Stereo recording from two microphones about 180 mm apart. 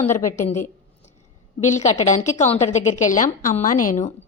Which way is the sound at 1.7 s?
40° left (ahead or behind).